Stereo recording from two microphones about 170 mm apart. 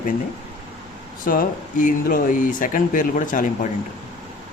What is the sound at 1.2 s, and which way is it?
Speech, 55° left (ahead or behind).